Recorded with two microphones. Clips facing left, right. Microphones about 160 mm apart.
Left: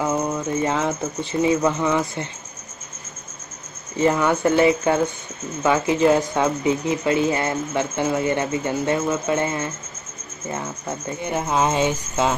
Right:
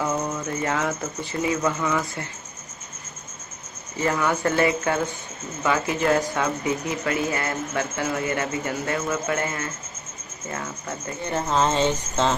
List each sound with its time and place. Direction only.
0.0 s speech: 20° left (ahead or behind)
4.0 s speech: 20° left (ahead or behind)